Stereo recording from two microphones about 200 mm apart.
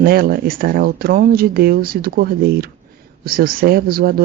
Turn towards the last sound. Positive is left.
turn(degrees=-50)  # may be behind; listen again after turning